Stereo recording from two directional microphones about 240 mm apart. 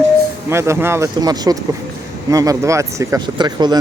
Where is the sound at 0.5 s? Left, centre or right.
Centre.